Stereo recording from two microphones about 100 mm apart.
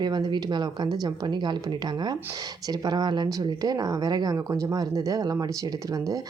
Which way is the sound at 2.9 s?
45° right (ahead or behind).